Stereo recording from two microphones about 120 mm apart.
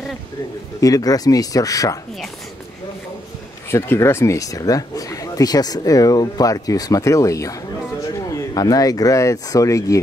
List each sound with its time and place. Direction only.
0.7 s speech: 30° left (ahead or behind)
3.7 s speech: 20° left (ahead or behind)